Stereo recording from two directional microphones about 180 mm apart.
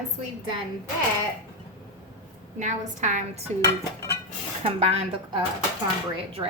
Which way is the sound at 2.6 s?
45° right (ahead or behind).